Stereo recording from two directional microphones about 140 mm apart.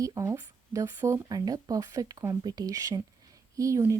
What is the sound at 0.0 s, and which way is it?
Speech, 25° right (ahead or behind).